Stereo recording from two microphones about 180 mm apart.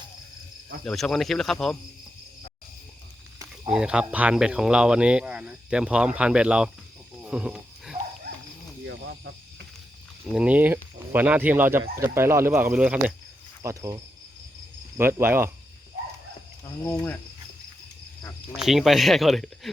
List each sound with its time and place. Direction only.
0.9 s speech: centre (ahead or behind)
3.7 s speech: 5° right (ahead or behind)
7.3 s a sound: 5° right (ahead or behind)
10.3 s speech: 10° right (ahead or behind)
13.6 s speech: 20° right (ahead or behind)
16.8 s speech: 15° left (ahead or behind)
18.5 s speech: centre (ahead or behind)